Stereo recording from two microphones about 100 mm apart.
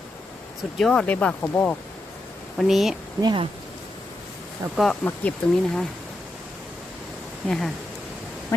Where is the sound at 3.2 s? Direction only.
45° right (ahead or behind).